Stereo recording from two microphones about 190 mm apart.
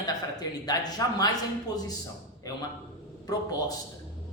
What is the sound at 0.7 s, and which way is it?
Speech, 20° left (ahead or behind).